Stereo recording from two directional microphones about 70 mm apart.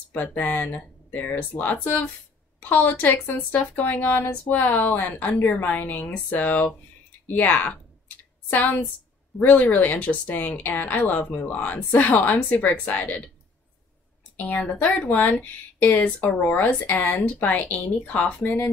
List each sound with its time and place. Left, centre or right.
0.1 s speech: left
9.4 s speech: left
14.3 s speech: left